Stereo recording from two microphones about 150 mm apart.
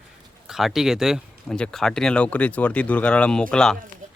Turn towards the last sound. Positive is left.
turn(degrees=5)  # may be behind; listen again after turning